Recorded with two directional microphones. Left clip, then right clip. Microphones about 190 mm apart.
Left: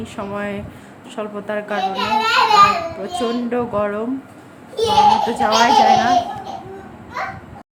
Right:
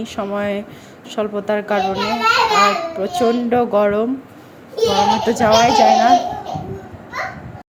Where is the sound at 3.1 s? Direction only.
20° right (ahead or behind).